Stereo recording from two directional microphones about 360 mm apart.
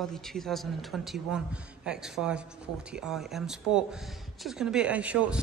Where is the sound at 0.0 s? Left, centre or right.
Centre.